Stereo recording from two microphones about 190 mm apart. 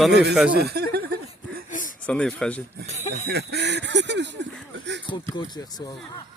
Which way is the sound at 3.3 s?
60° right (ahead or behind).